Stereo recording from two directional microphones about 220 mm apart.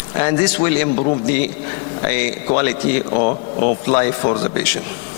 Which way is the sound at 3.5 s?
35° left (ahead or behind).